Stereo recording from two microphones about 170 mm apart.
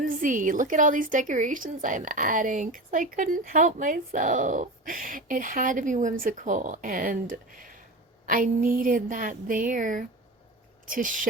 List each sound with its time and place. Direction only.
0.0 s a woman's voice: 50° right (ahead or behind)